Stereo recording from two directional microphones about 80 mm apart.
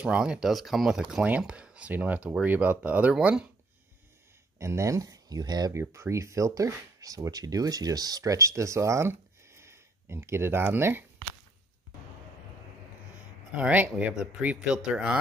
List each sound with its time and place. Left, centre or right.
0.0 s speech: centre
0.5 s speech: centre
4.6 s speech: right
5.7 s speech: right
13.6 s speech: centre